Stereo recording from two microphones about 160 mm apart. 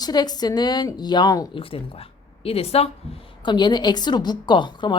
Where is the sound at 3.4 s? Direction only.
30° left (ahead or behind).